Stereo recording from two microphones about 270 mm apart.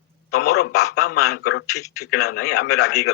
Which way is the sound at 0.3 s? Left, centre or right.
Left.